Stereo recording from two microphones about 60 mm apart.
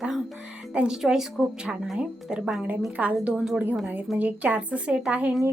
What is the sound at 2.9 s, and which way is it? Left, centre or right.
Speech, right.